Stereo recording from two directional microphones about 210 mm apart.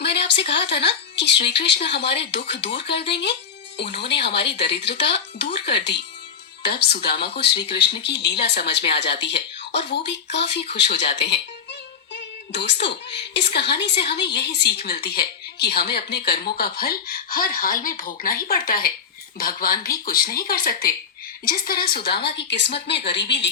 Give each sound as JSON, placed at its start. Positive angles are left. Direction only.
{"t": 0.0, "sound": "a woman's voice", "side_deg": 55}